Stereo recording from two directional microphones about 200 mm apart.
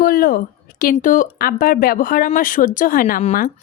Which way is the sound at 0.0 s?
45° left (ahead or behind).